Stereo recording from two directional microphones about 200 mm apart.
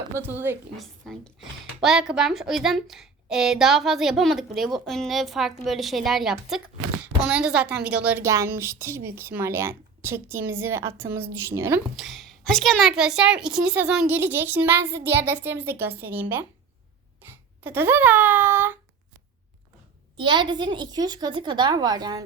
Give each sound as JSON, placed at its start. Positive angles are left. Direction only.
{"t": 0.1, "sound": "a woman's voice", "side_deg": -10}
{"t": 0.8, "sound": "a woman's voice", "side_deg": 0}
{"t": 11.9, "sound": "a woman's voice", "side_deg": 0}
{"t": 17.2, "sound": "a sound", "side_deg": -10}
{"t": 20.1, "sound": "a woman's voice", "side_deg": -25}